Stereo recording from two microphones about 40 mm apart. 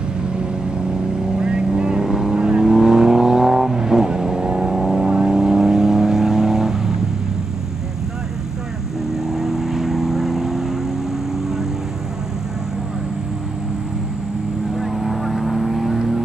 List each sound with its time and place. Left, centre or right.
1.4 s vehicle: centre
9.1 s vehicle: centre
14.8 s vehicle: centre